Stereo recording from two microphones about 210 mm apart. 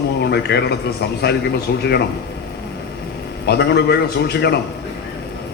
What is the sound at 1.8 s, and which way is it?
Speech, 50° left (ahead or behind).